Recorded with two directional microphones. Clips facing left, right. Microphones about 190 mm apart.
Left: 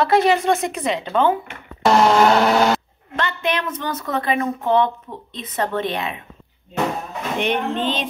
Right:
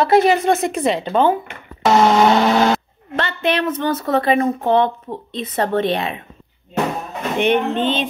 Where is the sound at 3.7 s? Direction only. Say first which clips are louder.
Right 6 dB; 50° right (ahead or behind).